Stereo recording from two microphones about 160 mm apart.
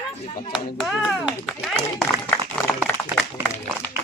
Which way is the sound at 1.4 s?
5° left (ahead or behind).